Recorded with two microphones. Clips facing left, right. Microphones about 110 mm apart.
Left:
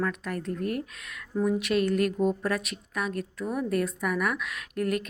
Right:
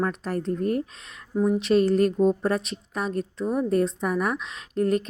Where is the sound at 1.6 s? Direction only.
30° right (ahead or behind).